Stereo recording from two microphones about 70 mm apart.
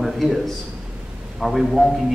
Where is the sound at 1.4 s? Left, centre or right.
Centre.